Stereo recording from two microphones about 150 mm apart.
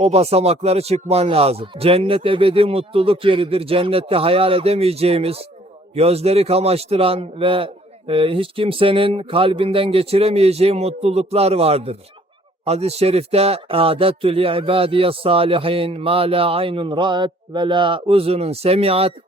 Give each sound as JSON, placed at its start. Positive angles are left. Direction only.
{"t": 0.0, "sound": "speech", "side_deg": -45}